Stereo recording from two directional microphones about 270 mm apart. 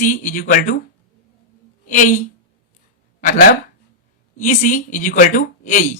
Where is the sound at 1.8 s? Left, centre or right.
Left.